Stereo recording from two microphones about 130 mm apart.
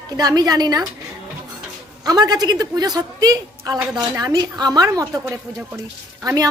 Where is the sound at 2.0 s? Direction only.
30° right (ahead or behind).